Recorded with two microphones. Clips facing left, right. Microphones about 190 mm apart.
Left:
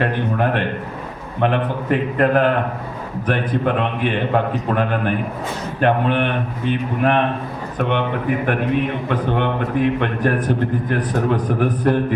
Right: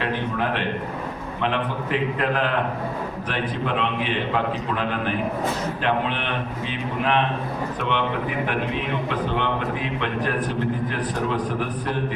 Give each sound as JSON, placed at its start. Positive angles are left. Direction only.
{"t": 0.0, "sound": "a man's voice", "side_deg": 50}